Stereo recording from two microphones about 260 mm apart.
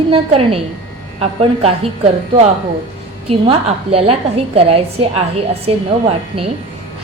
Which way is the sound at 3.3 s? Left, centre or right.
Right.